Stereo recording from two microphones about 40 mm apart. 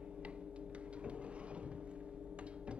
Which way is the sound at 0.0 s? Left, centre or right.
Right.